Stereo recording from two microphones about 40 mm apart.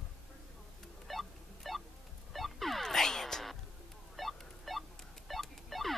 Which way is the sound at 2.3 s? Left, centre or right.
Centre.